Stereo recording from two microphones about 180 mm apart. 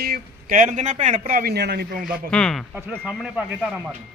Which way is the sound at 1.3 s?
55° right (ahead or behind).